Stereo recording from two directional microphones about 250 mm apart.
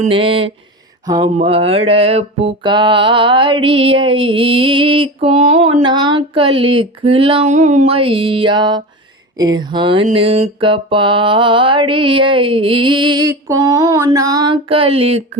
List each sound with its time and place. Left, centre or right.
0.0 s mantra: right
1.0 s a sound: centre
1.4 s mantra: right